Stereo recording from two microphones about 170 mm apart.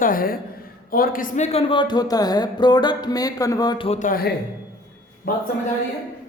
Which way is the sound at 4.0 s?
60° left (ahead or behind).